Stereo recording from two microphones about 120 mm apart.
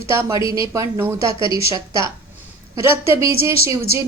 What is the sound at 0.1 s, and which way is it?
Speech, 25° right (ahead or behind).